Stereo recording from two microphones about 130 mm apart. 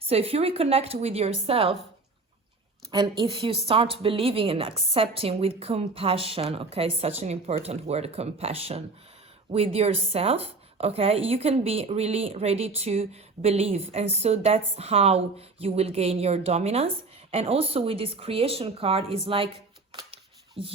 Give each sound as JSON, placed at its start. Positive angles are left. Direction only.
{"t": 0.1, "sound": "speech", "side_deg": -50}
{"t": 2.9, "sound": "speech", "side_deg": -35}
{"t": 20.6, "sound": "speech", "side_deg": -45}